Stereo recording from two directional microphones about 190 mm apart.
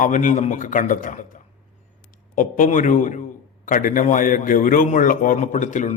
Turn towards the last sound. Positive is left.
turn(degrees=40)  # may be behind; listen again after turning